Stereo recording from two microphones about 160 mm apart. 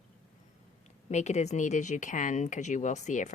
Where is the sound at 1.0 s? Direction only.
45° left (ahead or behind).